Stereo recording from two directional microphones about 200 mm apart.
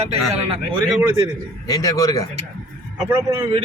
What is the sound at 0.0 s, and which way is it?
Speech, 30° right (ahead or behind).